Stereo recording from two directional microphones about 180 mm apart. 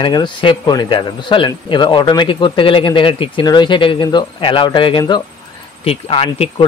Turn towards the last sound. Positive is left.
turn(degrees=30)  # may be behind; listen again after turning